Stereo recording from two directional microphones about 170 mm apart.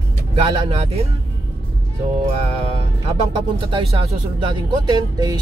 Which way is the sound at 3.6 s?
30° right (ahead or behind).